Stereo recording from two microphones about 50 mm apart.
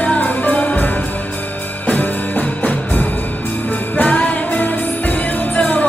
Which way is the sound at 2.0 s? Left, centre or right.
Left.